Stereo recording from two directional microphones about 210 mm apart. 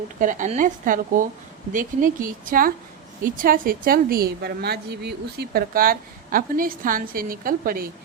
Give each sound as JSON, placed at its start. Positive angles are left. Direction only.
{"t": 0.2, "sound": "a woman's voice", "side_deg": -35}